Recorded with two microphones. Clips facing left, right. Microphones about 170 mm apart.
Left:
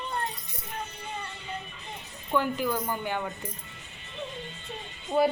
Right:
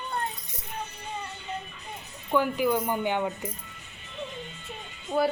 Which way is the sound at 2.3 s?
10° right (ahead or behind).